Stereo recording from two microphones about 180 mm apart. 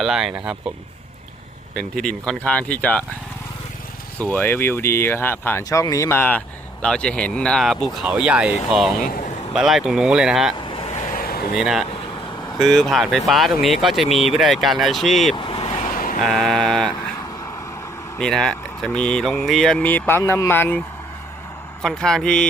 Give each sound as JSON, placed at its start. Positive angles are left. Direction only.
{"t": 0.0, "sound": "speech", "side_deg": -5}
{"t": 1.7, "sound": "speech", "side_deg": 5}
{"t": 4.2, "sound": "speech", "side_deg": 10}
{"t": 10.7, "sound": "vehicle", "side_deg": 30}
{"t": 11.1, "sound": "a sound", "side_deg": 55}
{"t": 11.5, "sound": "speech", "side_deg": -5}
{"t": 15.4, "sound": "vehicle", "side_deg": 30}
{"t": 15.9, "sound": "a sound", "side_deg": 50}
{"t": 16.2, "sound": "speech", "side_deg": 0}
{"t": 18.2, "sound": "speech", "side_deg": 5}